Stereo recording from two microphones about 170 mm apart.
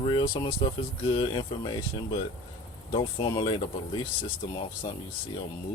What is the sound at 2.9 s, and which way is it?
Speech, 35° left (ahead or behind).